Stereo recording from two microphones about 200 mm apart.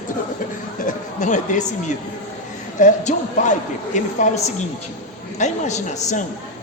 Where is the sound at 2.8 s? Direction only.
40° left (ahead or behind).